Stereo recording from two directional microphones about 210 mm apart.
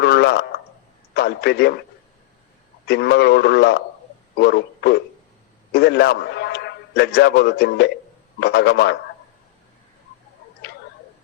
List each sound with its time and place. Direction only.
0.0 s a sound: 50° left (ahead or behind)
1.1 s a man's voice: 50° left (ahead or behind)
2.8 s a man's voice: 50° left (ahead or behind)